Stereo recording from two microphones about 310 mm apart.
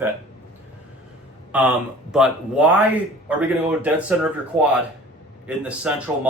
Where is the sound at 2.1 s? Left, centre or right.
Centre.